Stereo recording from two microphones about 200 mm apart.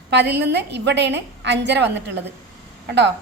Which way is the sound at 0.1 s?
55° right (ahead or behind).